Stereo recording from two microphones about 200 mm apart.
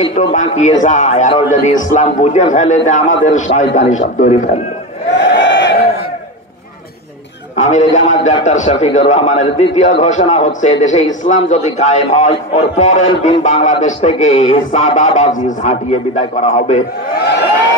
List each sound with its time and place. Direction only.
0.1 s a man's voice: 35° left (ahead or behind)
5.1 s crowd: 65° left (ahead or behind)
7.7 s a man's voice: 35° left (ahead or behind)
17.1 s a sound: 55° left (ahead or behind)